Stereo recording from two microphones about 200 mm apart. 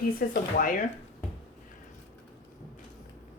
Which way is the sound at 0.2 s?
45° left (ahead or behind).